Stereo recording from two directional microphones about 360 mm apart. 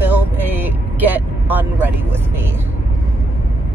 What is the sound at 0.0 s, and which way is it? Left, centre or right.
Vehicle, centre.